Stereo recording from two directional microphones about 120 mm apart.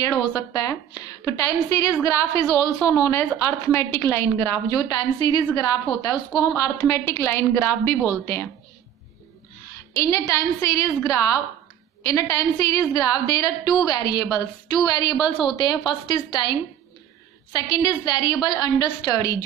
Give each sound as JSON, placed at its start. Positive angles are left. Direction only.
{"t": 0.0, "sound": "a woman's voice", "side_deg": 30}
{"t": 9.9, "sound": "a woman's voice", "side_deg": 25}